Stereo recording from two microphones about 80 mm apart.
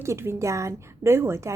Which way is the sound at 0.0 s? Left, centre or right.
Right.